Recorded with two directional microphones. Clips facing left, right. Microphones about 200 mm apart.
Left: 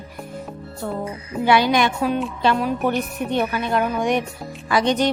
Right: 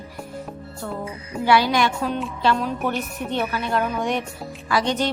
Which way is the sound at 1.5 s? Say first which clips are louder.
Left 1 dB; 20° left (ahead or behind).